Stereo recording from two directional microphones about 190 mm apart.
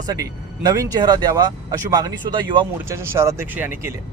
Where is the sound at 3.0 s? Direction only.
15° right (ahead or behind).